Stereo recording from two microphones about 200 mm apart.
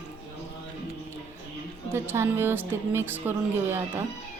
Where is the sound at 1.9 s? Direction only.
10° right (ahead or behind).